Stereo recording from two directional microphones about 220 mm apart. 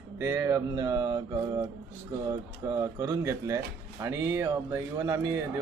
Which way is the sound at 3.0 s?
15° right (ahead or behind).